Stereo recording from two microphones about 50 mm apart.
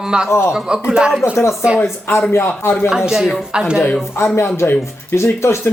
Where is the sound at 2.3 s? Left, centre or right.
Left.